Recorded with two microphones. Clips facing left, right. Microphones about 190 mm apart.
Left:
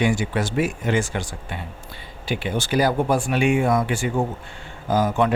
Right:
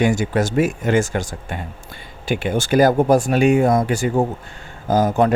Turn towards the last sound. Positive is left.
turn(degrees=-40)  # may be behind; listen again after turning